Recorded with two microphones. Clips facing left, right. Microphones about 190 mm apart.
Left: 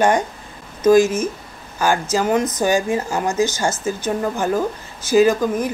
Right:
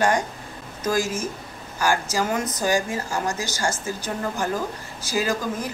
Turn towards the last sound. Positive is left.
turn(degrees=20)  # may be behind; listen again after turning